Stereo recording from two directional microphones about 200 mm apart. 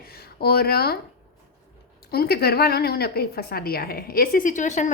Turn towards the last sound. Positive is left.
turn(degrees=35)  # may be behind; listen again after turning